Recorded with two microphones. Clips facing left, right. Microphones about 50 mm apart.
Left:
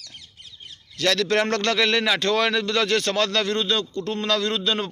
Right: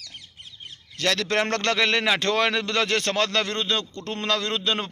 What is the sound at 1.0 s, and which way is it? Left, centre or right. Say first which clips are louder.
A man's voice: left 2 dB; right.